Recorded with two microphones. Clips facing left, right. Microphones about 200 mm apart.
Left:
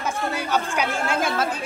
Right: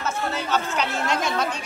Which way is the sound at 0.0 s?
10° left (ahead or behind).